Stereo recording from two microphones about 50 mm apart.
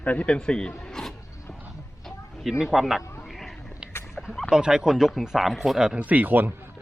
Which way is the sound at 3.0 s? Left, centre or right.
Left.